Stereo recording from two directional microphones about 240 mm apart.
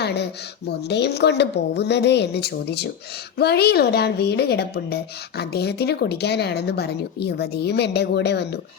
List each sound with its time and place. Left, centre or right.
0.0 s a woman's voice: left